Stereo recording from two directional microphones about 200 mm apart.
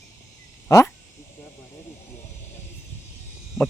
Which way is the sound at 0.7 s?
15° left (ahead or behind).